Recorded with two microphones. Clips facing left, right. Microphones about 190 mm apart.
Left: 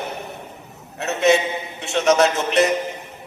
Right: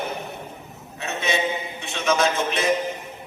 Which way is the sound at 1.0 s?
75° left (ahead or behind).